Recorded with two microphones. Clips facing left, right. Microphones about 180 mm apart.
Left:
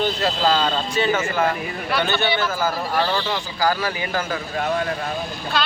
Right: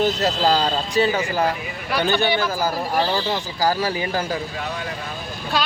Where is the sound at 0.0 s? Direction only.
40° right (ahead or behind).